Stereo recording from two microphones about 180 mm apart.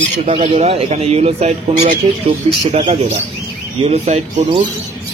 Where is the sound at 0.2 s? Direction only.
35° right (ahead or behind).